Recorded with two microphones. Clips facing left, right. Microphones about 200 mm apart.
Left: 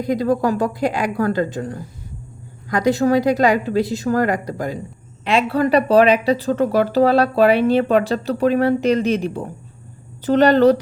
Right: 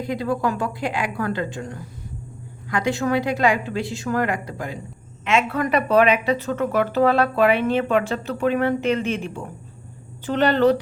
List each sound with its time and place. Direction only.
0.0 s a woman's voice: 40° left (ahead or behind)